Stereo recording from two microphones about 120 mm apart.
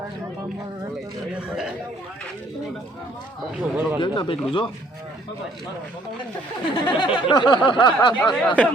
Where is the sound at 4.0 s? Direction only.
45° left (ahead or behind).